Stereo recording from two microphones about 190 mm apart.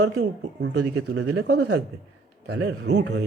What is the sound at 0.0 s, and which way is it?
Speech, 65° right (ahead or behind).